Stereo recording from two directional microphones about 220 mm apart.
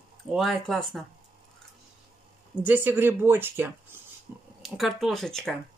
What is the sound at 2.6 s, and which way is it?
Speech, 10° right (ahead or behind).